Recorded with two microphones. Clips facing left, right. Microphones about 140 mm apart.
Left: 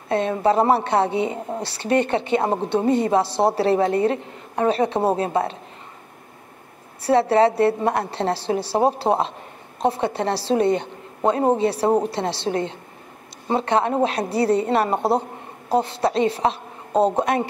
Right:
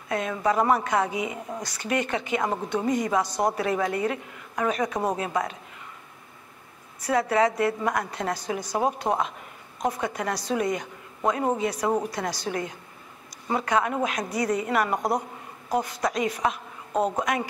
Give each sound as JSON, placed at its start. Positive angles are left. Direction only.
{"t": 0.1, "sound": "speech", "side_deg": 30}
{"t": 7.0, "sound": "a woman's voice", "side_deg": 30}